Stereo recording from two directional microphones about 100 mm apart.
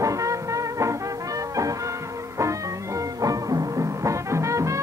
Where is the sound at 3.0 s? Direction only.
35° right (ahead or behind).